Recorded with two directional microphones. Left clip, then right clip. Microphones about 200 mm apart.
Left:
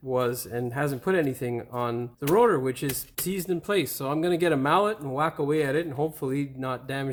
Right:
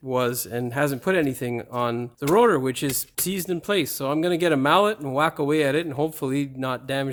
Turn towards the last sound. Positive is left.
turn(degrees=-35)  # may be behind; listen again after turning